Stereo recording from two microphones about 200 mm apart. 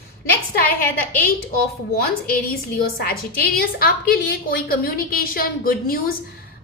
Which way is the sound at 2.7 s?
50° left (ahead or behind).